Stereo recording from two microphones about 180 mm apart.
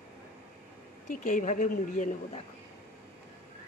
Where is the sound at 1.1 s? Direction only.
45° left (ahead or behind).